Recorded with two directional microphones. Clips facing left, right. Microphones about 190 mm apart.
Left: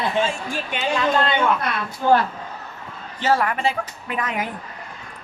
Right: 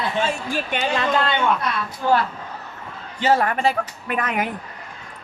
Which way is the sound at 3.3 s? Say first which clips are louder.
Right 2 dB; 35° right (ahead or behind).